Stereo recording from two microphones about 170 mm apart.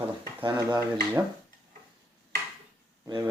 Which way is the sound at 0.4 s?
25° right (ahead or behind).